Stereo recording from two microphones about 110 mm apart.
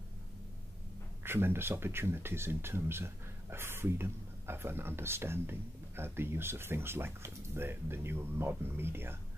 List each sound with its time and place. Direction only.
1.2 s speech: 20° right (ahead or behind)